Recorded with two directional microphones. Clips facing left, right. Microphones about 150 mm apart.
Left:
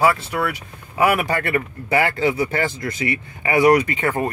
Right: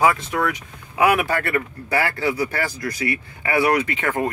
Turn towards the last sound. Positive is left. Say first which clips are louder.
# left 1 dB
turn(degrees=10)  # may be behind; listen again after turning